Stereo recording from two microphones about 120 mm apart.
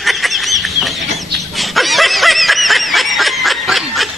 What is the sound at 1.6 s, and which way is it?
Snicker, centre (ahead or behind).